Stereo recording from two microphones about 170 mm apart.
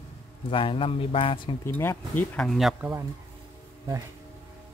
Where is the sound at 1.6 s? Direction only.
15° left (ahead or behind); by 2.9 s centre (ahead or behind).